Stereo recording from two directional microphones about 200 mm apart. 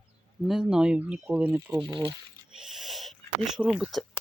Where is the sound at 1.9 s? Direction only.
20° right (ahead or behind).